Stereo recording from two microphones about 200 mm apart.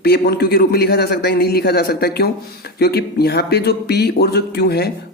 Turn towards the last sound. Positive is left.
turn(degrees=55)  # may be behind; listen again after turning